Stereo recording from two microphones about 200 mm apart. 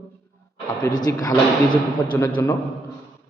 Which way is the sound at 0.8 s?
15° left (ahead or behind).